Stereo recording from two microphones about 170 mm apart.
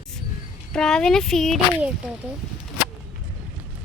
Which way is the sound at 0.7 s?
5° left (ahead or behind).